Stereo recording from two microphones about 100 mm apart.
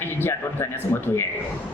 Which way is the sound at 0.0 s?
20° left (ahead or behind).